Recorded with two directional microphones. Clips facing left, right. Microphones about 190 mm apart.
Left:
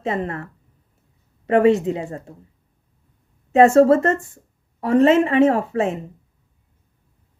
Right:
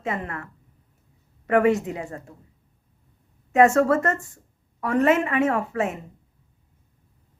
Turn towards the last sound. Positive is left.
turn(degrees=30)  # may be behind; listen again after turning